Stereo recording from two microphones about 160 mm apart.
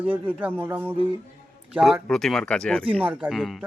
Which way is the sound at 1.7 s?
Centre (ahead or behind).